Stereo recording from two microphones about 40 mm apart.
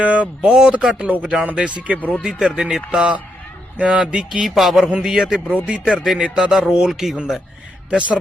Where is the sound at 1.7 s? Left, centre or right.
Right.